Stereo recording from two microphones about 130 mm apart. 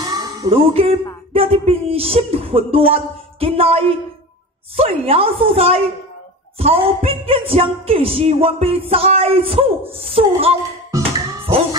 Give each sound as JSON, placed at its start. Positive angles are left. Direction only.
{"t": 0.0, "sound": "music", "side_deg": -30}
{"t": 0.5, "sound": "speech", "side_deg": -45}